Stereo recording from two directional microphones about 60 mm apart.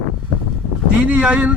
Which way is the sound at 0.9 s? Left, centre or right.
Right.